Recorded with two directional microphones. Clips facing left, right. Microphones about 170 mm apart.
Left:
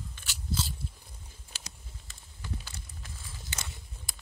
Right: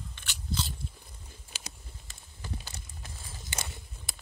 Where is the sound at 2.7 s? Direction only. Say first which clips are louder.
Right 1 dB; 20° right (ahead or behind).